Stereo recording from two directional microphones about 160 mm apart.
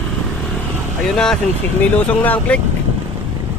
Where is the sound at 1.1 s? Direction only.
5° left (ahead or behind).